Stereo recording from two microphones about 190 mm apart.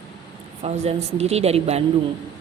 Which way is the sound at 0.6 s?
35° right (ahead or behind).